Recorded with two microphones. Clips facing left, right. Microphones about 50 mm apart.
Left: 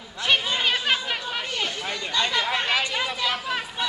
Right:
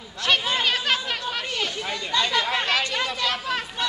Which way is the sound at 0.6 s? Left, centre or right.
Centre.